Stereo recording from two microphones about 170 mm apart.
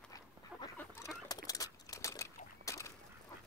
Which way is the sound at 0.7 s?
20° left (ahead or behind).